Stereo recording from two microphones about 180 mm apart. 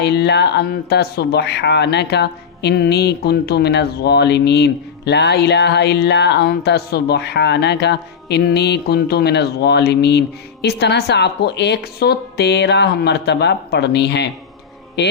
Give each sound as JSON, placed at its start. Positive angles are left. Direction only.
{"t": 0.0, "sound": "speech", "side_deg": 70}